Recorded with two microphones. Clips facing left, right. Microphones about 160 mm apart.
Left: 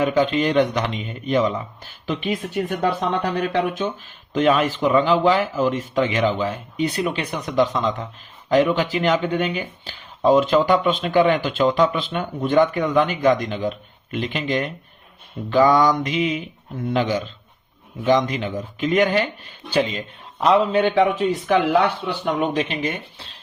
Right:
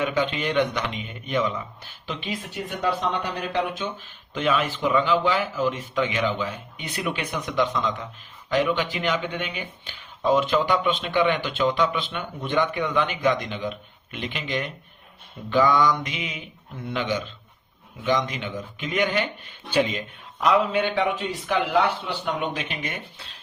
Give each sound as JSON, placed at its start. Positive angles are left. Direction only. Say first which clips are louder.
{"t": 0.0, "sound": "speech", "louder": "left 6 dB", "side_deg": 40}
{"t": 3.3, "sound": "speech", "louder": "left 5 dB", "side_deg": 55}
{"t": 4.4, "sound": "speech", "louder": "left 6 dB", "side_deg": 40}